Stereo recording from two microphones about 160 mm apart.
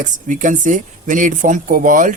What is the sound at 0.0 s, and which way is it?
Speech, 55° right (ahead or behind).